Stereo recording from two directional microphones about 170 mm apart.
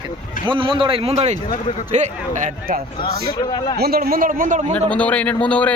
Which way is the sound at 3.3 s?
25° left (ahead or behind).